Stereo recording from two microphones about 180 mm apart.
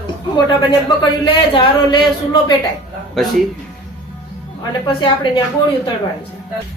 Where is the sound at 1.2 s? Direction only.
25° left (ahead or behind).